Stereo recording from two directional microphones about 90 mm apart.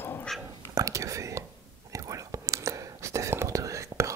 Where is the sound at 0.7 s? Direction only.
35° right (ahead or behind).